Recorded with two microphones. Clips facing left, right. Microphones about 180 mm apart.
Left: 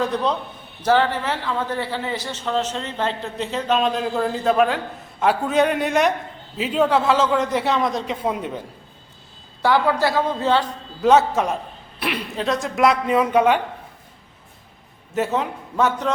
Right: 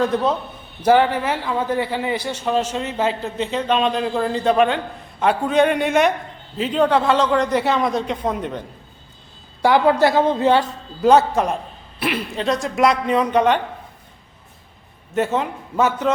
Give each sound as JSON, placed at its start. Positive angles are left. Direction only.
{"t": 0.0, "sound": "a man's voice", "side_deg": 0}
{"t": 0.8, "sound": "a man's voice", "side_deg": -15}
{"t": 9.6, "sound": "a man's voice", "side_deg": -15}
{"t": 11.0, "sound": "a man's voice", "side_deg": 0}
{"t": 15.1, "sound": "a man's voice", "side_deg": 0}